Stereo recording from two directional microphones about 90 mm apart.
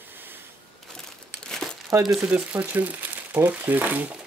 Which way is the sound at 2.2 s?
15° right (ahead or behind).